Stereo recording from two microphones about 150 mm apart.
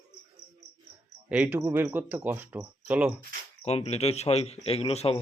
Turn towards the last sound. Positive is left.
turn(degrees=45)  # may be behind; listen again after turning